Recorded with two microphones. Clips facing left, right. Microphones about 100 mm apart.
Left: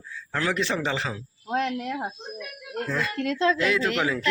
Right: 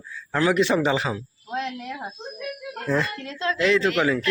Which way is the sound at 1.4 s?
45° left (ahead or behind).